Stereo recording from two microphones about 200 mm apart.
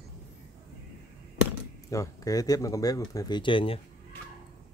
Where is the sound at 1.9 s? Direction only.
15° left (ahead or behind).